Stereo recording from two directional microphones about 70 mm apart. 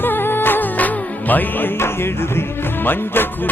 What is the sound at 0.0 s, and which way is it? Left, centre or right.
Music, left.